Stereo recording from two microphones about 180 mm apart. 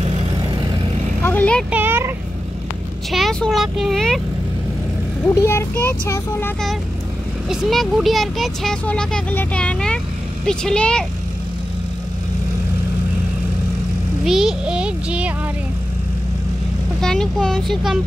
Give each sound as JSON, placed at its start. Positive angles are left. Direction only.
{"t": 0.0, "sound": "vehicle", "side_deg": -25}
{"t": 1.2, "sound": "vehicle", "side_deg": 10}
{"t": 1.7, "sound": "a sound", "side_deg": -10}
{"t": 3.1, "sound": "speech", "side_deg": 0}
{"t": 5.2, "sound": "a child's voice", "side_deg": 15}
{"t": 7.4, "sound": "speech", "side_deg": 0}
{"t": 14.2, "sound": "speech", "side_deg": 0}
{"t": 17.0, "sound": "speech", "side_deg": 5}